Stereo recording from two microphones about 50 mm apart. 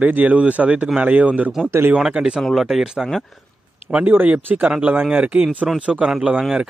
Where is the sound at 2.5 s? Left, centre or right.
Centre.